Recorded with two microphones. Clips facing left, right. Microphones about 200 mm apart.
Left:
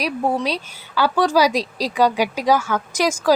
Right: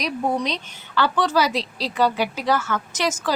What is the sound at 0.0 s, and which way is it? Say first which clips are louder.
Speech: left 2 dB; 5° left (ahead or behind).